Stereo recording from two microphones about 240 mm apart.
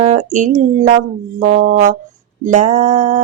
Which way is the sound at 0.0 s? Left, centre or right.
Right.